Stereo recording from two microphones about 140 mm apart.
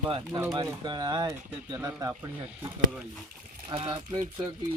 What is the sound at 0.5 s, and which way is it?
Speech, 30° right (ahead or behind).